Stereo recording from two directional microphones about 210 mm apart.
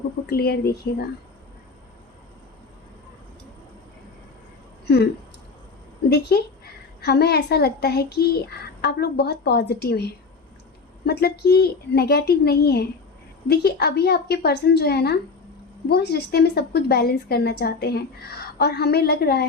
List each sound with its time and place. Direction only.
0.3 s speech: 50° left (ahead or behind)
6.1 s speech: 50° left (ahead or behind)